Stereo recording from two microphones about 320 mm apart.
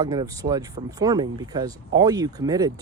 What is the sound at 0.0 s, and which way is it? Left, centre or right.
Speech, centre.